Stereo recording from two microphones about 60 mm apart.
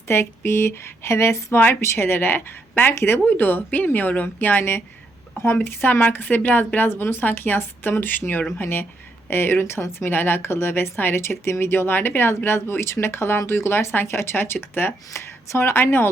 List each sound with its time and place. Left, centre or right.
0.1 s speech: left
1.5 s a woman's voice: left
15.1 s speech: left